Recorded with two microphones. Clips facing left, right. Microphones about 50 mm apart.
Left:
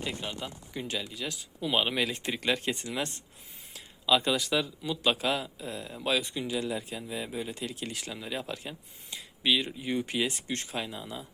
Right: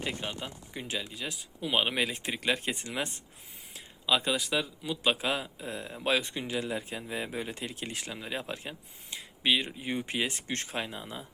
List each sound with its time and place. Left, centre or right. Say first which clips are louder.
0.0 s speech: even; right
4.0 s speech: left 2 dB; centre; by 7.6 s right
7.6 s speech: left 1 dB; right